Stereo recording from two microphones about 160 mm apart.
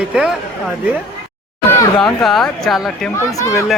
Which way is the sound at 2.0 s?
Centre (ahead or behind).